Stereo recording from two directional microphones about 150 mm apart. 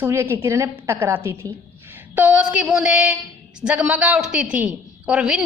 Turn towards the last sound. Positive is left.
turn(degrees=-5)  # may be behind; listen again after turning